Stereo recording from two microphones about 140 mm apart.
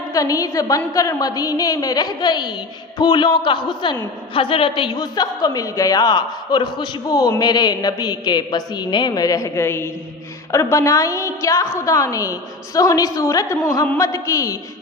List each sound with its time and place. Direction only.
0.1 s a woman's voice: 25° left (ahead or behind)